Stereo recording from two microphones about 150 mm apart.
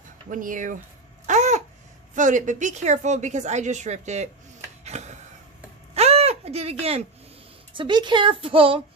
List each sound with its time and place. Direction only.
0.3 s speech: 65° right (ahead or behind)
1.3 s babbling: 50° right (ahead or behind)
2.1 s a woman's voice: 55° right (ahead or behind)
4.8 s a sound: 50° right (ahead or behind)
7.7 s speech: 30° right (ahead or behind)